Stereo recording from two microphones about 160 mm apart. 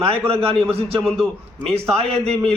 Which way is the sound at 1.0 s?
Centre (ahead or behind).